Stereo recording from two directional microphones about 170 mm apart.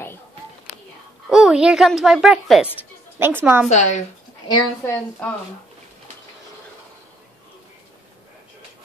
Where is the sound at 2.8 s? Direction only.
15° right (ahead or behind).